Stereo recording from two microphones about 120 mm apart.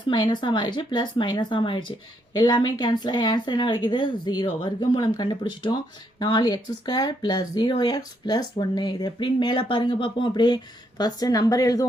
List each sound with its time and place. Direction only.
0.1 s speech: 40° left (ahead or behind)